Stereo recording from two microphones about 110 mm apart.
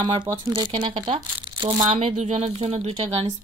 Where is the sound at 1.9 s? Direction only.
80° right.